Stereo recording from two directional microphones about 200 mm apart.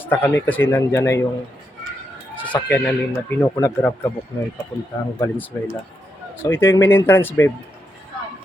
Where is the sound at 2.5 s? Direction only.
5° left (ahead or behind).